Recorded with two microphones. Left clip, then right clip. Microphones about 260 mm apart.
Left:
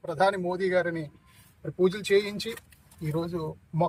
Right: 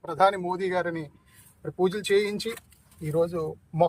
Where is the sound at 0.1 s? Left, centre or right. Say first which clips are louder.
Right 3 dB; right.